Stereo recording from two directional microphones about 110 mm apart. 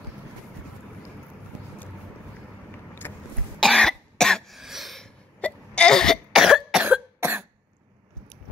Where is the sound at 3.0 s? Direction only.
25° left (ahead or behind).